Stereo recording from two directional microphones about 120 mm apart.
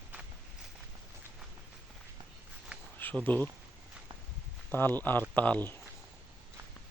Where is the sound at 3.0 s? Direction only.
15° left (ahead or behind).